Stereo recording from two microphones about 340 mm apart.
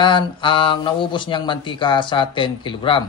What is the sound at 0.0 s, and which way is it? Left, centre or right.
Speech, centre.